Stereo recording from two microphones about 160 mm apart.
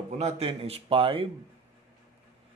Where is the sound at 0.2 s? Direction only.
40° right (ahead or behind).